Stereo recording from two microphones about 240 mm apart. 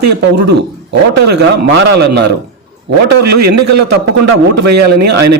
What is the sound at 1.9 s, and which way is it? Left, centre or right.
Speech, right.